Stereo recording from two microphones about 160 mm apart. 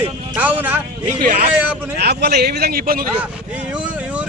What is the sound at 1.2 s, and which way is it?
Speech, 60° right (ahead or behind).